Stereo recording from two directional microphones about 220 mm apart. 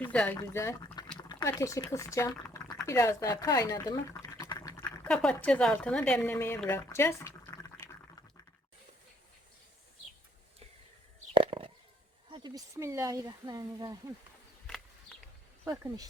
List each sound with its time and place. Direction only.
0.0 s speech: 5° left (ahead or behind)
1.3 s speech: 15° left (ahead or behind)
5.0 s speech: 5° left (ahead or behind)
11.3 s a sound: 25° right (ahead or behind)
12.3 s speech: 20° right (ahead or behind)
15.6 s speech: 15° right (ahead or behind)